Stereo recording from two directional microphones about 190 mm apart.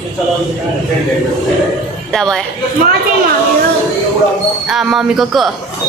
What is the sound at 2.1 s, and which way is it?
Speech, 5° left (ahead or behind).